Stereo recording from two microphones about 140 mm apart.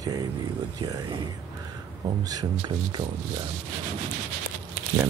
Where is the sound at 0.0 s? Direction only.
25° right (ahead or behind).